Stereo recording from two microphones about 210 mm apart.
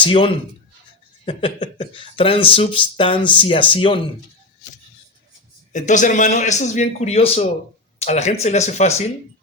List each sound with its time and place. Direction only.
0.0 s speech: 25° left (ahead or behind)
5.7 s a man's voice: 35° left (ahead or behind)